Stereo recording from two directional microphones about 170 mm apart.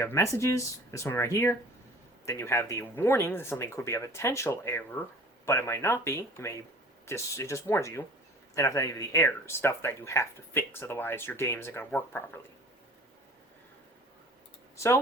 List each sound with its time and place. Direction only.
0.0 s speech: 15° left (ahead or behind)